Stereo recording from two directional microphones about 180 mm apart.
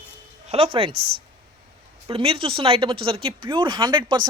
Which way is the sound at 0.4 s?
30° right (ahead or behind).